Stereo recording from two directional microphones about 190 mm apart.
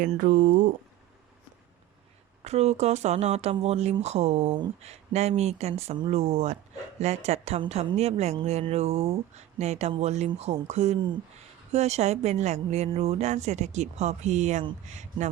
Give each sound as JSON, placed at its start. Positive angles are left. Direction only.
{"t": 0.0, "sound": "speech", "side_deg": -45}
{"t": 2.4, "sound": "a woman's voice", "side_deg": -35}